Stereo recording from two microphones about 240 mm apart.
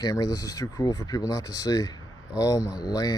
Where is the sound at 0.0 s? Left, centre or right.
Centre.